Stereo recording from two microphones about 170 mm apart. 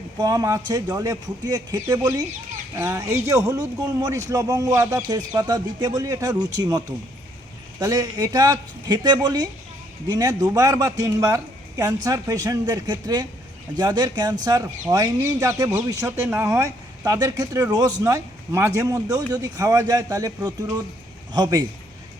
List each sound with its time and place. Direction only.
0.2 s speech: 20° right (ahead or behind)